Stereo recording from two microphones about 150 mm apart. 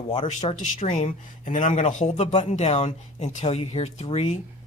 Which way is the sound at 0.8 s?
55° left (ahead or behind).